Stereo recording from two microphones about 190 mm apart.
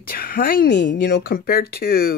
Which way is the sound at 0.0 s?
50° left (ahead or behind).